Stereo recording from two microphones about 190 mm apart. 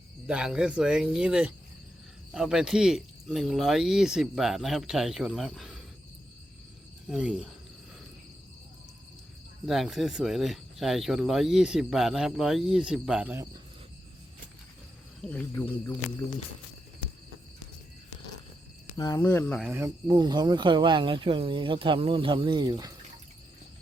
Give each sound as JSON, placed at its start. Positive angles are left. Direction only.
{"t": 0.3, "sound": "speech", "side_deg": -5}
{"t": 7.1, "sound": "speech", "side_deg": -5}
{"t": 9.6, "sound": "speech", "side_deg": 0}
{"t": 15.2, "sound": "speech", "side_deg": 10}
{"t": 18.9, "sound": "speech", "side_deg": 15}
{"t": 20.1, "sound": "speech", "side_deg": -25}